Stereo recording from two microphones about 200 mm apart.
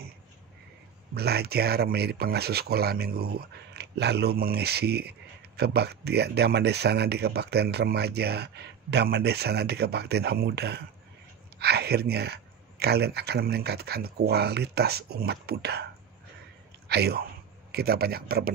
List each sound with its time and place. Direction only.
1.1 s speech: 55° right (ahead or behind)